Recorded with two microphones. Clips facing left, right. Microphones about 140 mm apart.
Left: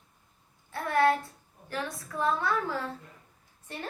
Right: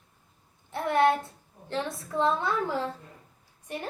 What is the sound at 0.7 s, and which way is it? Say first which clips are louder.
A woman's voice: right 2 dB; 20° right (ahead or behind).